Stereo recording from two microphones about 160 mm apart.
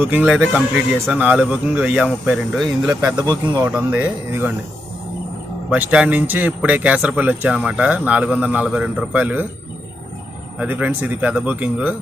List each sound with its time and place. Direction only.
0.0 s speech: 10° right (ahead or behind)
3.4 s speech: 25° right (ahead or behind)
3.7 s speech: 10° right (ahead or behind)
5.7 s speech: 10° right (ahead or behind)
10.6 s speech: 10° right (ahead or behind)